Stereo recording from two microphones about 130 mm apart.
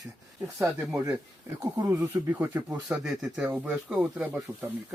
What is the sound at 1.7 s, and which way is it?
A man's voice, 25° right (ahead or behind).